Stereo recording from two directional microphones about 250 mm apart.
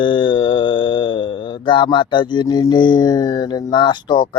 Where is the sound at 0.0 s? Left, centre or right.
Centre.